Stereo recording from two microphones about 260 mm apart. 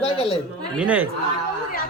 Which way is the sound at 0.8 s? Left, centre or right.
Centre.